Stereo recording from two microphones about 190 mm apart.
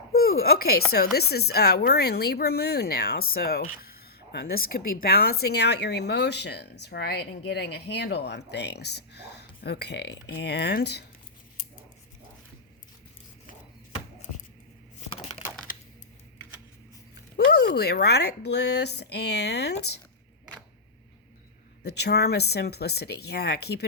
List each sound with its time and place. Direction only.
0.1 s speech: 55° left (ahead or behind)
15.1 s crushing: 30° left (ahead or behind)
17.3 s speech: 60° left (ahead or behind)
21.8 s speech: 60° left (ahead or behind)